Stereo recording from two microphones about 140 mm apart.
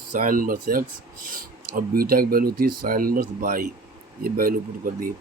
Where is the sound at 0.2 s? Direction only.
80° right.